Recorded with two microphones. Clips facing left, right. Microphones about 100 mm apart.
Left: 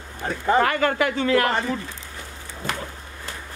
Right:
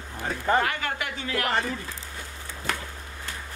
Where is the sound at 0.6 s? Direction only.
55° left (ahead or behind).